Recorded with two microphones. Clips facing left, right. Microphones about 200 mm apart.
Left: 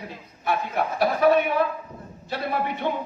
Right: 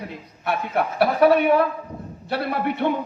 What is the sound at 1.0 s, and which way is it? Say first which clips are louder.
Speech: right 3 dB; 60° right (ahead or behind).